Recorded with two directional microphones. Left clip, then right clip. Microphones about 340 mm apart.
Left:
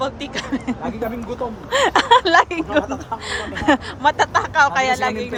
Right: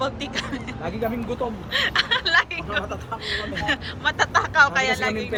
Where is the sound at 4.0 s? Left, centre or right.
Centre.